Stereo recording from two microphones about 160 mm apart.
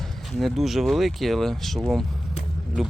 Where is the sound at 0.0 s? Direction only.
Centre (ahead or behind).